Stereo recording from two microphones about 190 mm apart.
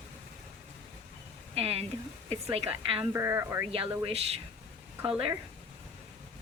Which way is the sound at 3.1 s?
15° right (ahead or behind).